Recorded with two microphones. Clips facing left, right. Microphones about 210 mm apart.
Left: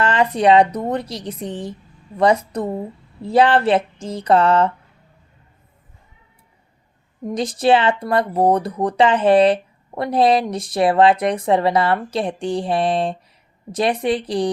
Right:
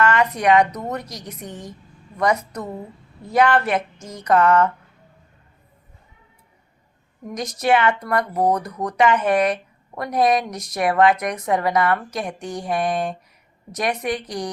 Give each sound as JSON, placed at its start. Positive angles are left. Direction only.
{"t": 0.0, "sound": "speech", "side_deg": 30}
{"t": 7.3, "sound": "speech", "side_deg": 30}